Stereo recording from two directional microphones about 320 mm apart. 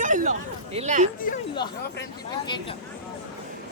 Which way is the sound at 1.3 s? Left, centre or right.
Left.